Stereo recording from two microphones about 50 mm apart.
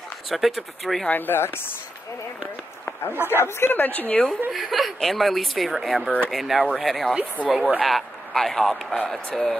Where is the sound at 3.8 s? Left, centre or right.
Left.